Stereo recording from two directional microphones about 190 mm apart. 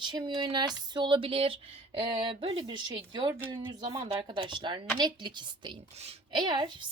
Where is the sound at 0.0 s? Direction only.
25° right (ahead or behind).